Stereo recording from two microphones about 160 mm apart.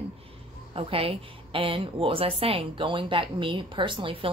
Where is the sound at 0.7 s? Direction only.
35° right (ahead or behind).